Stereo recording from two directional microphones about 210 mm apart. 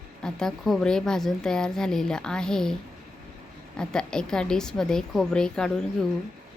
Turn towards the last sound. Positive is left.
turn(degrees=5)  # may be behind; listen again after turning